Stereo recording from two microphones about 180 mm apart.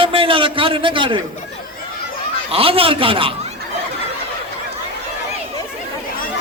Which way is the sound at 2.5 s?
30° right (ahead or behind).